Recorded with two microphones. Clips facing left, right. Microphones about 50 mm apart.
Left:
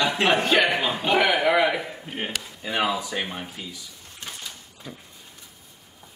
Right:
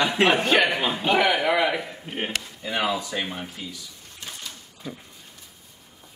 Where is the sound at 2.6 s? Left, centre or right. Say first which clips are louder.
Left 1 dB; centre.